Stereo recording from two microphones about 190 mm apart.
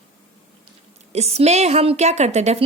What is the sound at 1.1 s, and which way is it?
A woman's voice, 35° right (ahead or behind).